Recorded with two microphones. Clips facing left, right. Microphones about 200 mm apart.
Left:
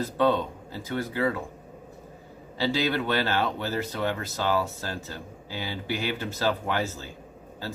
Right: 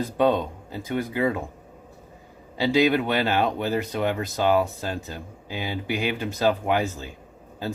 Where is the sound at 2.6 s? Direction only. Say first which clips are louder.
Right 6 dB; 15° right (ahead or behind).